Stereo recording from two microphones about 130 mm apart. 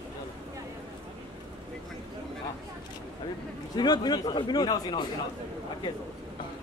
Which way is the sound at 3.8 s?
35° left (ahead or behind).